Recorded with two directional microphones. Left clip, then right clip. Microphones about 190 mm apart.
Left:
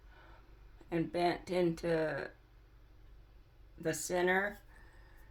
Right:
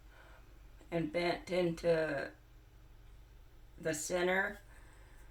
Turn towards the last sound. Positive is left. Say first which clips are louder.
# left 2 dB
turn(degrees=30)  # may be behind; listen again after turning